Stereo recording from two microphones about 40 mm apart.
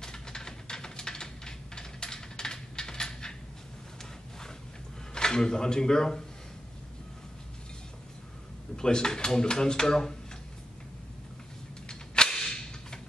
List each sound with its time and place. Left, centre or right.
0.0 s a sound: centre
5.1 s speech: centre
8.7 s speech: centre
11.9 s cap gun: centre